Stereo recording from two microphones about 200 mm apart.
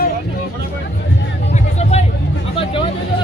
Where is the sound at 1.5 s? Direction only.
35° left (ahead or behind).